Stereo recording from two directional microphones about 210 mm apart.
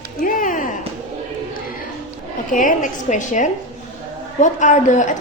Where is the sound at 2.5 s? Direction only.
40° left (ahead or behind).